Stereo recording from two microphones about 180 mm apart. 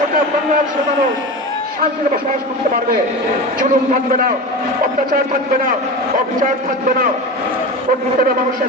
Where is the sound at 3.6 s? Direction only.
50° right (ahead or behind).